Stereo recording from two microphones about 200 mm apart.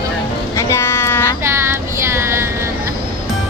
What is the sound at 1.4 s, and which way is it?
Female singing, 10° right (ahead or behind).